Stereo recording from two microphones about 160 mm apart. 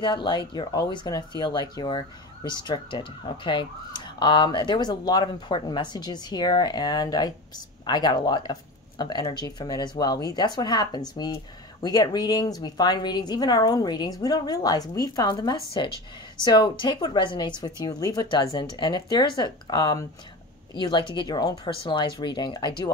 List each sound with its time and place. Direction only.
0.0 s speech: 30° left (ahead or behind)